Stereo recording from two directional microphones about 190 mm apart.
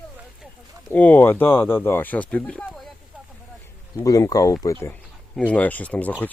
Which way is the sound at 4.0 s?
15° left (ahead or behind).